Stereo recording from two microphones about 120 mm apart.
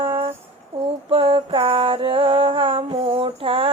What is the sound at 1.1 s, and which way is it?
Music, 50° right (ahead or behind).